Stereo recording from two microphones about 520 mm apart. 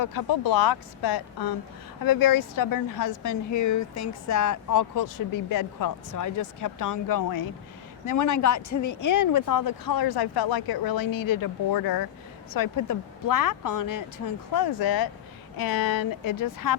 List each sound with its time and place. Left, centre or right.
0.0 s speech: left